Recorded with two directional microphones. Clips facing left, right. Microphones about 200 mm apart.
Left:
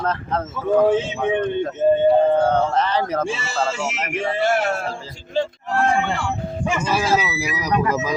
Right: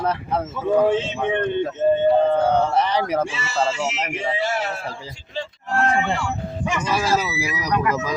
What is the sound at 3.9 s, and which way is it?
Speech, 50° left (ahead or behind).